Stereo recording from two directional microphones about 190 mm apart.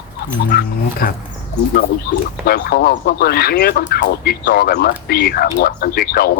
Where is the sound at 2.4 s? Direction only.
55° left (ahead or behind).